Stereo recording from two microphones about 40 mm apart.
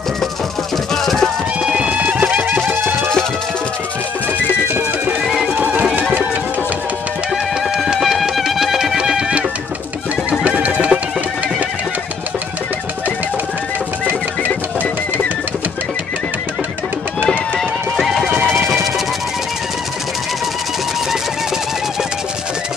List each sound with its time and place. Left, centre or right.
1.0 s music: centre
1.6 s music: right
5.2 s music: centre
7.7 s music: centre
8.0 s music: centre
8.9 s music: centre
10.4 s music: right
17.3 s music: centre